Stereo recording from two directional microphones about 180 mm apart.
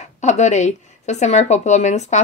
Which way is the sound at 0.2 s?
40° left (ahead or behind).